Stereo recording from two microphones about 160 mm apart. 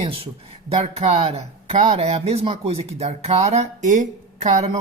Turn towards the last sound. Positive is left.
turn(degrees=-40)  # may be behind; listen again after turning